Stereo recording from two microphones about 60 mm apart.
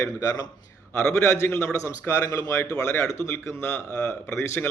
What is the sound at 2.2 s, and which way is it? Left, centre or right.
Speech, left.